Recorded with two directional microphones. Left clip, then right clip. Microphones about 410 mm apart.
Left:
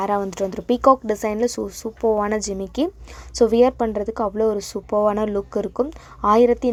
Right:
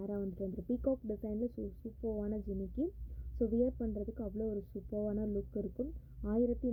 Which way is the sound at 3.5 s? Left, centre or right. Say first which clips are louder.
Left 17 dB; left.